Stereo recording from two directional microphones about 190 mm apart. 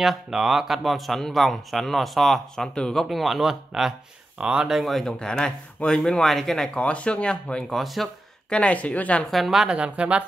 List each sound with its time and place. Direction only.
0.0 s speech: centre (ahead or behind)